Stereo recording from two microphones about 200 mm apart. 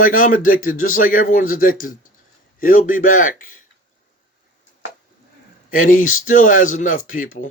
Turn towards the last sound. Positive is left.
turn(degrees=45)  # may be behind; listen again after turning